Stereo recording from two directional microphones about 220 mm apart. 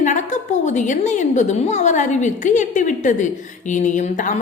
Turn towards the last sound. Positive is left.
turn(degrees=35)  # may be behind; listen again after turning